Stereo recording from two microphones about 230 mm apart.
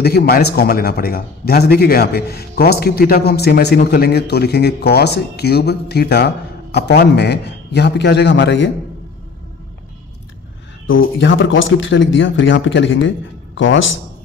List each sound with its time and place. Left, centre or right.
0.0 s a man's voice: left
10.9 s speech: left